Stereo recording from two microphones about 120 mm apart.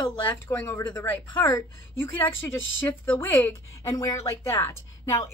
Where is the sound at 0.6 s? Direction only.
15° left (ahead or behind).